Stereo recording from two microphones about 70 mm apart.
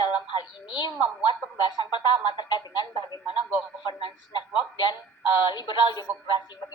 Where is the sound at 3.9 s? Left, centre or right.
Left.